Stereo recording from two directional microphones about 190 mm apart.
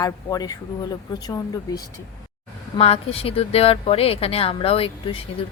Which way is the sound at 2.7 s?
30° left (ahead or behind).